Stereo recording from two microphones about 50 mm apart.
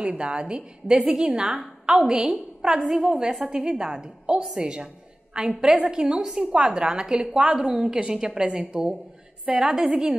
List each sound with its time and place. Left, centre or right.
0.0 s a woman's voice: right